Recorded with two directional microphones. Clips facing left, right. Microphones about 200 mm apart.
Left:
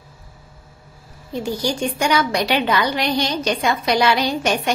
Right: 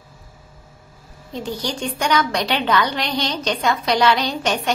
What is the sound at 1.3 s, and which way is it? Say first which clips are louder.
A woman's voice: left 4 dB; 10° left (ahead or behind).